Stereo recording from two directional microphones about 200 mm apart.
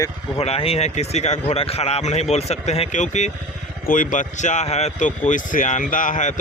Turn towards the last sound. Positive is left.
turn(degrees=40)  # may be behind; listen again after turning